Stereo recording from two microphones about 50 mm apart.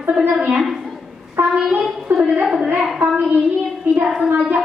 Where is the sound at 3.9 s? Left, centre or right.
Right.